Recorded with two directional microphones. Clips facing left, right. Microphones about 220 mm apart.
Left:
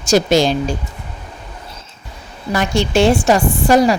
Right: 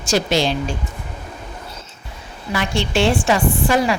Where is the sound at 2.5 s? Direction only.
45° left (ahead or behind).